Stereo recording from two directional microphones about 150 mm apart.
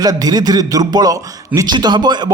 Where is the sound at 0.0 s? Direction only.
25° right (ahead or behind).